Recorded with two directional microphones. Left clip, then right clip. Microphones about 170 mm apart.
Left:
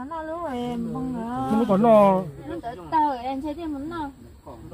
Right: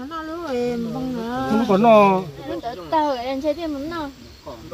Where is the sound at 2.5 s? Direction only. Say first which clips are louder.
Right 4 dB; 15° left (ahead or behind).